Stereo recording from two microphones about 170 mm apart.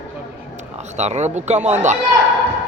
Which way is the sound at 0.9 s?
40° right (ahead or behind).